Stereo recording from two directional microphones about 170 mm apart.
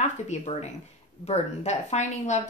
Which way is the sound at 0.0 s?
45° left (ahead or behind).